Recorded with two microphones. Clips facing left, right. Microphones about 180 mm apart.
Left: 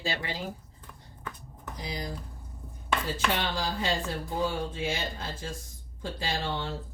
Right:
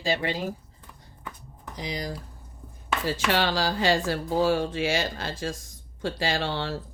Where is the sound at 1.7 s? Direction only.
75° right (ahead or behind).